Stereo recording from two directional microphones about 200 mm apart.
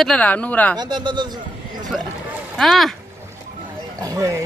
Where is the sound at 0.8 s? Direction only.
20° right (ahead or behind).